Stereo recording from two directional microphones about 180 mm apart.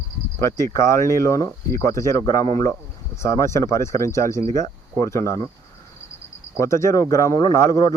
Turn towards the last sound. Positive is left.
turn(degrees=15)  # may be behind; listen again after turning